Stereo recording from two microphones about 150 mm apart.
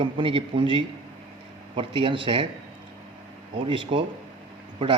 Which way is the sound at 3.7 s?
35° right (ahead or behind).